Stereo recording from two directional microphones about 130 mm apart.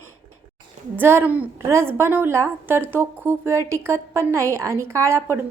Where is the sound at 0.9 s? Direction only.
15° right (ahead or behind).